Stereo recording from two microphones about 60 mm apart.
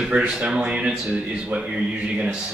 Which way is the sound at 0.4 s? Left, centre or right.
Right.